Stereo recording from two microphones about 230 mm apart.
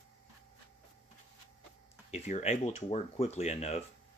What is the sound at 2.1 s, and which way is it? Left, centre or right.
Speech, left.